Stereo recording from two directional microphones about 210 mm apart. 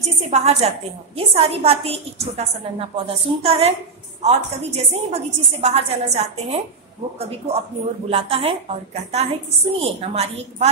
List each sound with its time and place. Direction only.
0.3 s a woman's voice: 30° right (ahead or behind)